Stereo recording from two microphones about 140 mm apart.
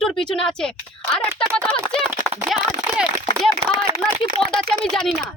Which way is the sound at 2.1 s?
20° right (ahead or behind).